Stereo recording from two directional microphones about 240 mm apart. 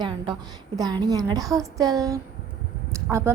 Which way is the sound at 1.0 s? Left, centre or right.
Centre.